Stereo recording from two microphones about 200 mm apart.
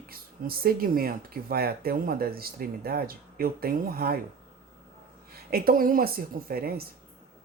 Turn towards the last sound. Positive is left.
turn(degrees=-50)  # may be behind; listen again after turning